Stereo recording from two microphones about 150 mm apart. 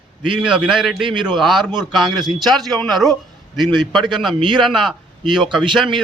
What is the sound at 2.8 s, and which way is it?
A man's voice, centre (ahead or behind).